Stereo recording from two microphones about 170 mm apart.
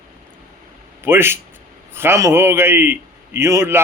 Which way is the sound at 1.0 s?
15° right (ahead or behind).